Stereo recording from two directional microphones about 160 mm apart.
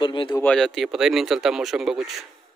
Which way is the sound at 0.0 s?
30° left (ahead or behind).